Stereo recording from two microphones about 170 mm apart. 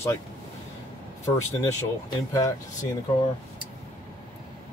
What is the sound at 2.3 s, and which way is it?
Speech, 20° left (ahead or behind).